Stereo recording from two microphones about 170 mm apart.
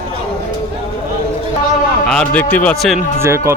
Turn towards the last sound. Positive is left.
turn(degrees=-15)  # may be behind; listen again after turning